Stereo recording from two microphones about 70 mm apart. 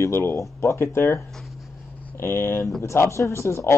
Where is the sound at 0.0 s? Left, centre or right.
Left.